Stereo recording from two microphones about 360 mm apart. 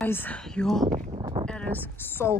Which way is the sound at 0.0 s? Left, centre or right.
Centre.